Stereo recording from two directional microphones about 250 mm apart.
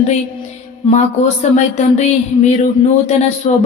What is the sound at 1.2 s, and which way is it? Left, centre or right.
Speech, left.